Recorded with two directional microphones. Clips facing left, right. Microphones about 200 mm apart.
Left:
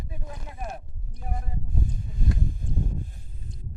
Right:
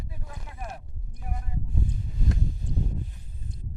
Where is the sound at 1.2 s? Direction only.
35° left (ahead or behind).